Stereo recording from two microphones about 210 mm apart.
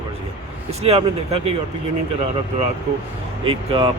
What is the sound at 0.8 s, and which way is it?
Speech, 30° right (ahead or behind).